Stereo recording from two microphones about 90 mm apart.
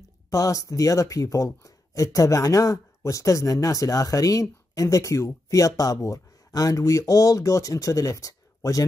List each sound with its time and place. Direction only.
0.3 s speech: 40° left (ahead or behind)